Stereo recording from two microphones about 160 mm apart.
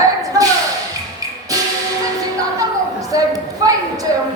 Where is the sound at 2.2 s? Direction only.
20° right (ahead or behind).